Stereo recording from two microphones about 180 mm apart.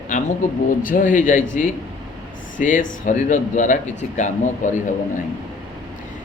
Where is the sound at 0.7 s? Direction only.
50° left (ahead or behind).